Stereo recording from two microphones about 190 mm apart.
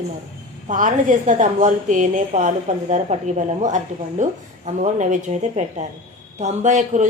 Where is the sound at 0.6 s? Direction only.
45° right (ahead or behind).